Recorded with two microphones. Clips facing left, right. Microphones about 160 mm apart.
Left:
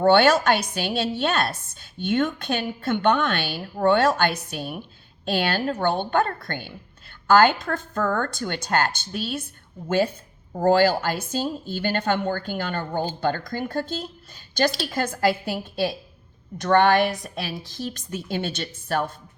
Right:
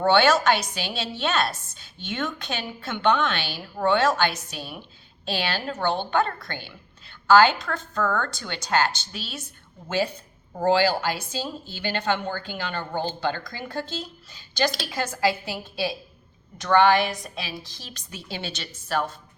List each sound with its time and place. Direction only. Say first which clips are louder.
0.0 s a woman's voice: left 2 dB; 50° left (ahead or behind)